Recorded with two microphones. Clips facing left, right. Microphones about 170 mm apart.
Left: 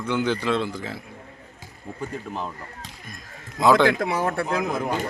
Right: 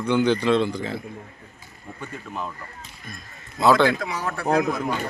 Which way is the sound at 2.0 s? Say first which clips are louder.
Left 2 dB; 30° left (ahead or behind).